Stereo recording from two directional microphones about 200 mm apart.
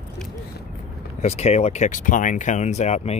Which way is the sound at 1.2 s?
35° left (ahead or behind).